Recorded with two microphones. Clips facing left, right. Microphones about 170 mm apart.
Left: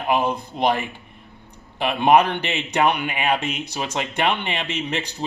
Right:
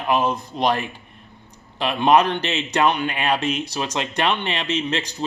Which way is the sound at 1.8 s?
15° left (ahead or behind).